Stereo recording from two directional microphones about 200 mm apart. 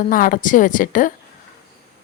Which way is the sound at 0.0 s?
45° left (ahead or behind).